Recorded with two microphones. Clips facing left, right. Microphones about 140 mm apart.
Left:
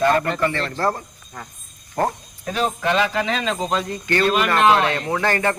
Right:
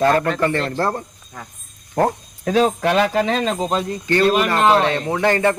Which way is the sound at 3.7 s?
30° right (ahead or behind).